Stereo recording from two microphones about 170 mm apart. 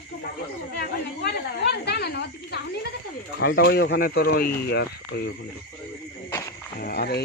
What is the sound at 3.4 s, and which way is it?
Speech, 70° left (ahead or behind).